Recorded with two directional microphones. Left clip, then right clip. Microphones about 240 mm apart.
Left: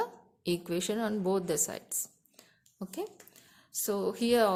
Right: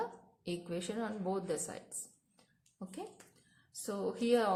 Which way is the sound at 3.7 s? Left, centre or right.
Left.